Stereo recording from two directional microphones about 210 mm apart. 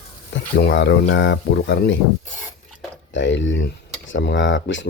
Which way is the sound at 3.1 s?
60° left (ahead or behind).